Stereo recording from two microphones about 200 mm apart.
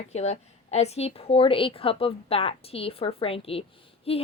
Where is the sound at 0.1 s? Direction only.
30° left (ahead or behind).